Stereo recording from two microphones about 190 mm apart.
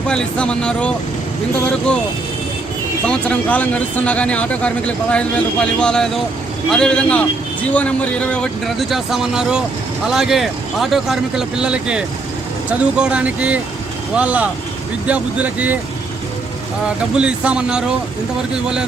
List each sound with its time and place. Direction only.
0.1 s speech: 5° left (ahead or behind)
3.1 s speech: 5° left (ahead or behind)
17.2 s speech: 5° right (ahead or behind)